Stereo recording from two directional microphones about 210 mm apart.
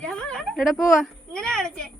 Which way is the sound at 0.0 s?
5° left (ahead or behind).